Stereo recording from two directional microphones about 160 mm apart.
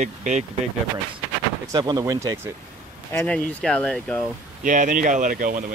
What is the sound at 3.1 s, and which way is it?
Speech, 5° left (ahead or behind).